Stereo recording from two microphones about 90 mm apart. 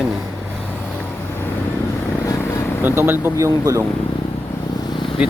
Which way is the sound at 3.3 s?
40° right (ahead or behind).